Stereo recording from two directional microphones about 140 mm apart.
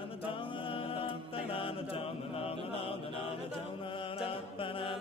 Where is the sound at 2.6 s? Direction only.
40° left (ahead or behind).